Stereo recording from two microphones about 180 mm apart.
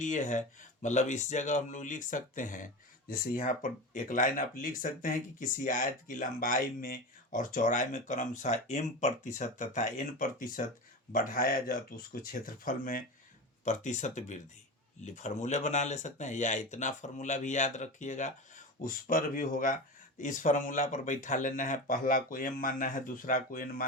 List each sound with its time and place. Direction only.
0.0 s speech: 45° left (ahead or behind)